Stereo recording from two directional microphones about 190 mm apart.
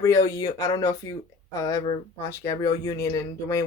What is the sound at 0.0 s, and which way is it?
Speech, 15° left (ahead or behind).